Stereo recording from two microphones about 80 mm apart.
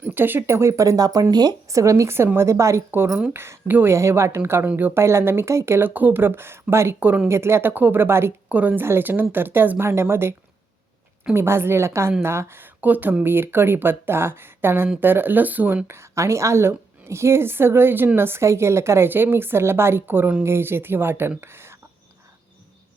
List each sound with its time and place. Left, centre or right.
0.0 s a woman's voice: right
1.7 s a woman's voice: right
3.1 s speech: centre
3.3 s a woman's voice: right
4.6 s a woman's voice: right
11.3 s a woman's voice: right
15.9 s a woman's voice: right